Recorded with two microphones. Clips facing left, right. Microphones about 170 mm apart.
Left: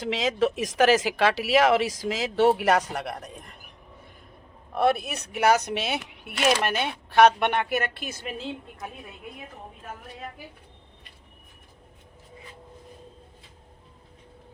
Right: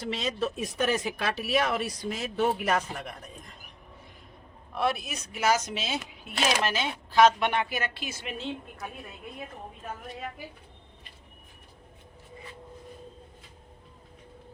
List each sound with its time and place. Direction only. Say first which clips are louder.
0.0 s speech: left 6 dB; 90° left; by 3.6 s 65° left (ahead or behind)
4.7 s speech: left 6 dB; 55° left (ahead or behind); by 8.5 s 40° left (ahead or behind)